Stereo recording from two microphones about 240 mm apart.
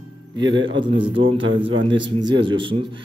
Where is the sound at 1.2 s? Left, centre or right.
Right.